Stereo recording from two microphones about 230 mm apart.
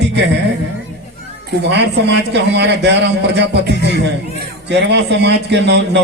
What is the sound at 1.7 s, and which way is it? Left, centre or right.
Speech, right.